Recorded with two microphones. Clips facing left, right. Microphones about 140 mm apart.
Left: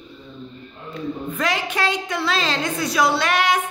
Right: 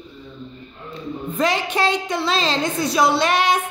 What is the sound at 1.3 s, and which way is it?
A woman's voice, 25° right (ahead or behind).